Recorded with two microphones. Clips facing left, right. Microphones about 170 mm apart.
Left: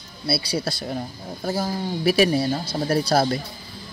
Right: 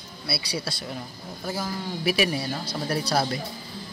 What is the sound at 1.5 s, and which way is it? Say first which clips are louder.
A man's voice: left 5 dB; 35° left (ahead or behind).